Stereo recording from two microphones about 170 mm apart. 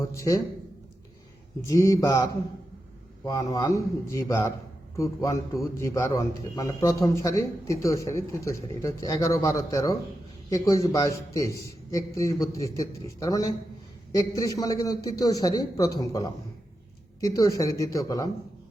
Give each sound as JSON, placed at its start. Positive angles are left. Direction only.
{"t": 0.0, "sound": "a man's voice", "side_deg": 15}
{"t": 1.6, "sound": "a man's voice", "side_deg": 20}